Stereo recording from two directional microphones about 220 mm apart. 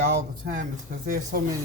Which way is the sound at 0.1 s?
35° right (ahead or behind).